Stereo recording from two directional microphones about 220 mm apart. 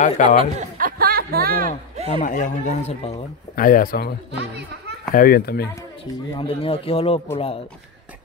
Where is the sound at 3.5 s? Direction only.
40° left (ahead or behind).